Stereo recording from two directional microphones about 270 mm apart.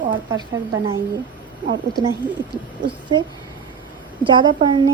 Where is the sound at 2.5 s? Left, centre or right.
Centre.